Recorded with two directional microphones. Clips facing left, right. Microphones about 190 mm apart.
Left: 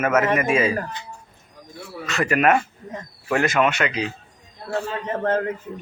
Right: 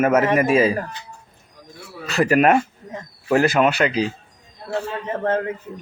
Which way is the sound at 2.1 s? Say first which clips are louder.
Right 3 dB; 35° right (ahead or behind).